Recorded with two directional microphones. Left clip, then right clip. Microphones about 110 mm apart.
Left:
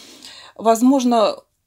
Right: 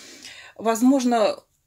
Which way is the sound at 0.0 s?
30° left (ahead or behind).